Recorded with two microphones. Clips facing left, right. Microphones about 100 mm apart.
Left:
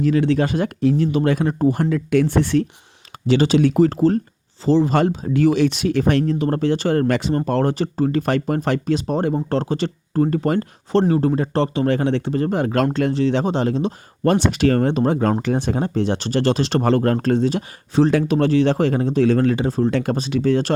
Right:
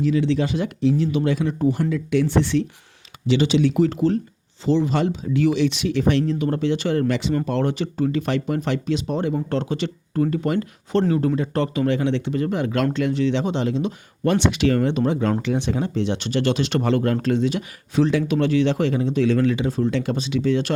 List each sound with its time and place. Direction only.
0.0 s speech: 55° left (ahead or behind); by 11.9 s 30° left (ahead or behind)
11.9 s speech: 45° left (ahead or behind)